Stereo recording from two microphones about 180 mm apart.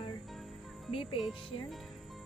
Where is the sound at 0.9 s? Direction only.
30° left (ahead or behind).